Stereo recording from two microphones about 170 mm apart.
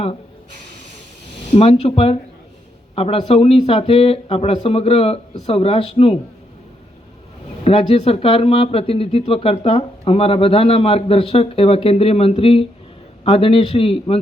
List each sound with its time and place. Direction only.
1.5 s speech: 35° left (ahead or behind)
7.6 s speech: 35° left (ahead or behind)